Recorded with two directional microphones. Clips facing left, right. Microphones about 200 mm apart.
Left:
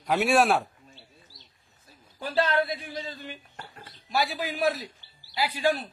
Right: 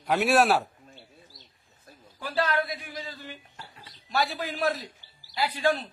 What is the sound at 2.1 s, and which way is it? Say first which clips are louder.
A man's voice: left 2 dB; 25° left (ahead or behind).